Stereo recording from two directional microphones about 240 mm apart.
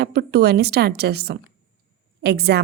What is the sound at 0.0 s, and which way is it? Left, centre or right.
A woman's voice, right.